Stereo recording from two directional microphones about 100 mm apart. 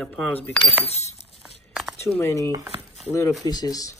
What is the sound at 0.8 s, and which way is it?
Speech, 90° left.